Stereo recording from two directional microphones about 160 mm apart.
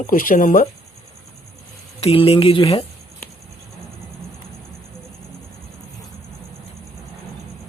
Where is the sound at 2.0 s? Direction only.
35° left (ahead or behind).